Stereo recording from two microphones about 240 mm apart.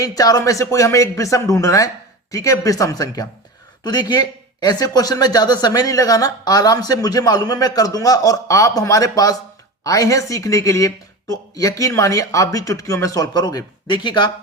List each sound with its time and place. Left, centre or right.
0.0 s speech: centre